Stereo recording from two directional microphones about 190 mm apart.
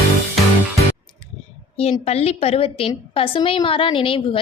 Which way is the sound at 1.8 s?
35° left (ahead or behind).